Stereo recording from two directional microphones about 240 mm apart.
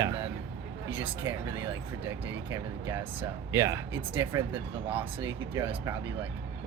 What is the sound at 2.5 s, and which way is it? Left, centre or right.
Speech, centre.